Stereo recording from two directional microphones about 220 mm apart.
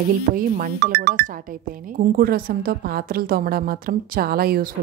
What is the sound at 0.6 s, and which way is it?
A woman's voice, 45° right (ahead or behind).